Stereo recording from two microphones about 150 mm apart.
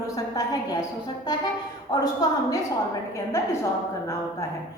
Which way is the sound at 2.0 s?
25° left (ahead or behind).